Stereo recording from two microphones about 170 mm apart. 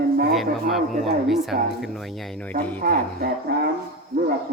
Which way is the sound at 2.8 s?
55° right (ahead or behind).